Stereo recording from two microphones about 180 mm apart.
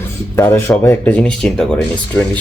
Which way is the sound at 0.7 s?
10° left (ahead or behind).